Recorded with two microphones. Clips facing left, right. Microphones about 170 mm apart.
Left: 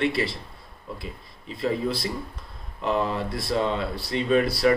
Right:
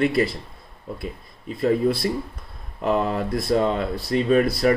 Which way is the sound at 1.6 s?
55° right (ahead or behind).